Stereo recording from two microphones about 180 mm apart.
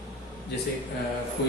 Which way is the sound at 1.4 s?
70° left (ahead or behind).